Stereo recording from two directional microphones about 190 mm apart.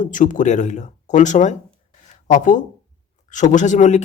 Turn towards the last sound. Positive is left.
turn(degrees=40)  # may be behind; listen again after turning